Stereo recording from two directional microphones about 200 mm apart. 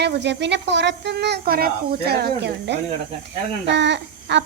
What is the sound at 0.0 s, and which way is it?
Speech, 60° right (ahead or behind).